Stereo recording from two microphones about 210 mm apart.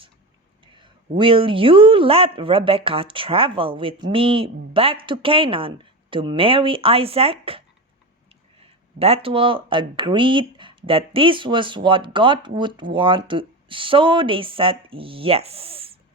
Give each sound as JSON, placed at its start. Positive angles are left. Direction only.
{"t": 0.8, "sound": "speech", "side_deg": -25}
{"t": 9.0, "sound": "speech", "side_deg": -30}